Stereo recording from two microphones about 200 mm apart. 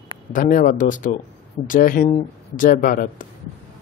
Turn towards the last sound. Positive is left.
turn(degrees=45)  # may be behind; listen again after turning